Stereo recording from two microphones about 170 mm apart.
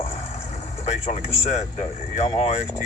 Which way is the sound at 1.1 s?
40° left (ahead or behind).